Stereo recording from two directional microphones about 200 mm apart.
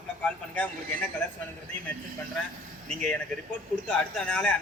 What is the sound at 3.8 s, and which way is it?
Speech, 5° left (ahead or behind).